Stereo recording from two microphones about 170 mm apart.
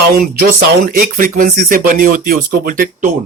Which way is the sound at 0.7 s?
55° right (ahead or behind).